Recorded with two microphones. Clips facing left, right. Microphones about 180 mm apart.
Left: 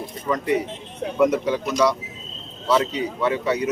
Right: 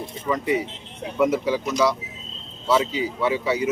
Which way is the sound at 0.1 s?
Centre (ahead or behind).